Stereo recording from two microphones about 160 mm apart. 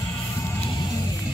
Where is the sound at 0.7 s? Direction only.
25° left (ahead or behind).